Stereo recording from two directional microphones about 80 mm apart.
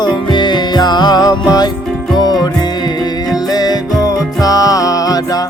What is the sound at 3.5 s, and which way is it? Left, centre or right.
Music, left.